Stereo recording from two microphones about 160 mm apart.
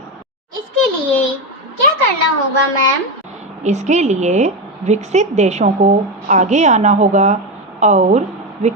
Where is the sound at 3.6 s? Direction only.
45° right (ahead or behind).